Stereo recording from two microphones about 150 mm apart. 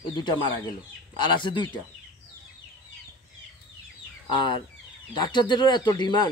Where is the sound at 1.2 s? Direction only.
30° left (ahead or behind).